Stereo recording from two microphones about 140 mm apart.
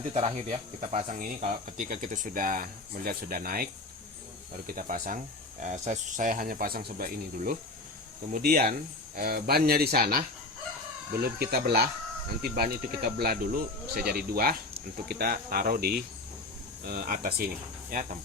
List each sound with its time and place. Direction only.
0.1 s speech: 50° right (ahead or behind); by 17.5 s 90° right